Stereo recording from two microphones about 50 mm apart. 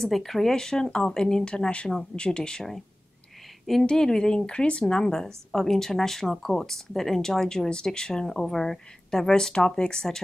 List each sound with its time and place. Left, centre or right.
0.0 s speech: centre
3.8 s speech: centre